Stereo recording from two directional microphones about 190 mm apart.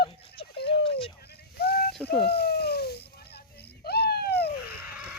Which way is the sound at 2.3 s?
55° left (ahead or behind).